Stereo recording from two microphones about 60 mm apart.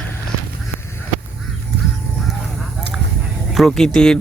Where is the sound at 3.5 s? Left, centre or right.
Centre.